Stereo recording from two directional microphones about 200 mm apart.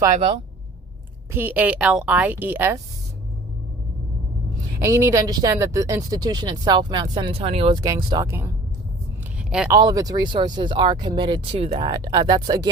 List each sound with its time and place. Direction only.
1.3 s a woman's voice: 10° right (ahead or behind)
4.8 s speech: 15° right (ahead or behind)
9.4 s a sound: 5° right (ahead or behind)
9.7 s speech: 20° right (ahead or behind)